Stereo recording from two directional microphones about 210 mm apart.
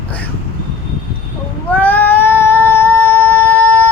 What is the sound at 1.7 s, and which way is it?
Child singing, 10° left (ahead or behind).